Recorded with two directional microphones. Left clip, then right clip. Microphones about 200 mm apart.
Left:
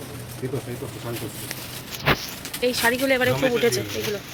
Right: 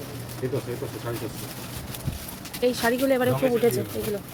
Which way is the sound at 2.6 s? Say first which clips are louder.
Left 2 dB; 25° right (ahead or behind).